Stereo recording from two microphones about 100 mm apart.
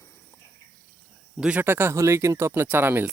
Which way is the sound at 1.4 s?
15° right (ahead or behind).